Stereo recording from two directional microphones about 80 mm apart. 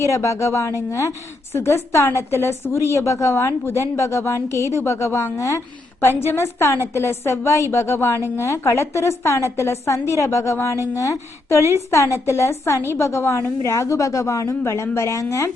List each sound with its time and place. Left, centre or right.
0.0 s a woman's voice: left